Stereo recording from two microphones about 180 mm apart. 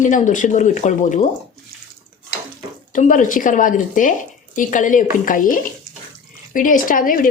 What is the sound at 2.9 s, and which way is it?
Speech, 45° left (ahead or behind).